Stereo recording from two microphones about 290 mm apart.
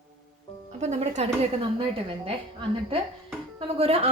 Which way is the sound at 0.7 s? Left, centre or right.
Right.